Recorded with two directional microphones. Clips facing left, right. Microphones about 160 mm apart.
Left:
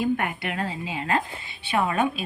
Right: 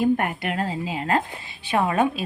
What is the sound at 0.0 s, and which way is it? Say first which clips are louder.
A woman's voice: right 4 dB; 45° right (ahead or behind).